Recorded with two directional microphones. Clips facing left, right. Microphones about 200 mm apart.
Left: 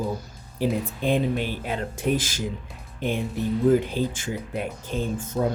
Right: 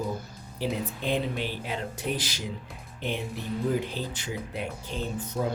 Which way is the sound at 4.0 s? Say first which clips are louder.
Left 7 dB; 50° left (ahead or behind).